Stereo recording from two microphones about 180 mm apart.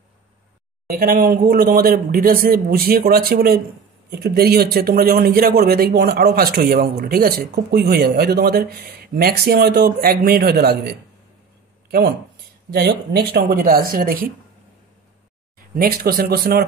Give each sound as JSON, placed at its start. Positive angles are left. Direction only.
{"t": 0.8, "sound": "speech", "side_deg": -50}
{"t": 13.1, "sound": "speech", "side_deg": -60}
{"t": 15.7, "sound": "speech", "side_deg": -55}